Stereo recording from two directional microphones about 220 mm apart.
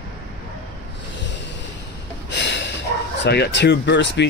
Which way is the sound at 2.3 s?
50° left (ahead or behind).